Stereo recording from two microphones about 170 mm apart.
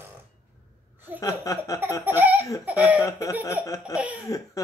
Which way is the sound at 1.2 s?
20° left (ahead or behind).